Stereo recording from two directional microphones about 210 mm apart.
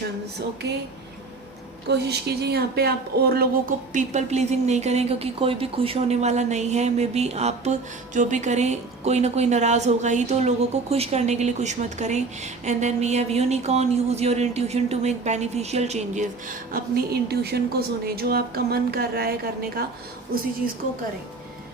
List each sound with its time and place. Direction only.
1.9 s speech: 55° right (ahead or behind)